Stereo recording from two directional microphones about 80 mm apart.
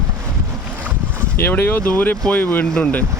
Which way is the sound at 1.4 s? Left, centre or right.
Left.